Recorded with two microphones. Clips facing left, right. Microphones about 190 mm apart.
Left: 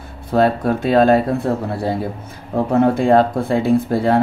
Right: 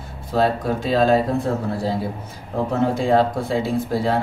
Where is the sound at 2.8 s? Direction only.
55° left (ahead or behind).